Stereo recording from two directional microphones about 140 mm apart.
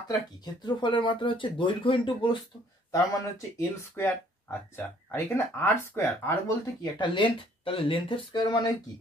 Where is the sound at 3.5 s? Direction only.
20° left (ahead or behind).